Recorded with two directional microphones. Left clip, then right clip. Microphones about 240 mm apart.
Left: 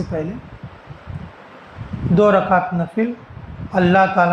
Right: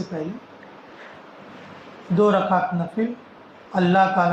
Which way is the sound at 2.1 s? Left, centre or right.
Left.